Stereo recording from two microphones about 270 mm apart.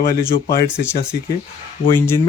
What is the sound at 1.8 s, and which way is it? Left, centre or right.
Speech, centre.